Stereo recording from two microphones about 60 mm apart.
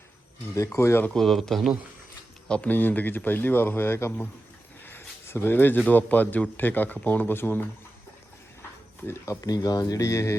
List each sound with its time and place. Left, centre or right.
0.8 s speech: left
1.1 s speech: centre
2.6 s speech: left
4.9 s a sound: left
5.9 s speech: left
9.0 s speech: left